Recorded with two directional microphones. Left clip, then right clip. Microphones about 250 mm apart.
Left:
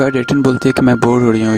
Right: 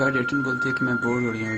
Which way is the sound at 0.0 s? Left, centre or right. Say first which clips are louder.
Left 9 dB; left.